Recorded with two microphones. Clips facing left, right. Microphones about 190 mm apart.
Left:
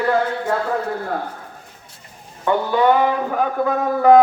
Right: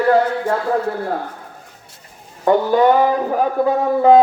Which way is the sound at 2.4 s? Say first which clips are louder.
Right 3 dB; 40° right (ahead or behind).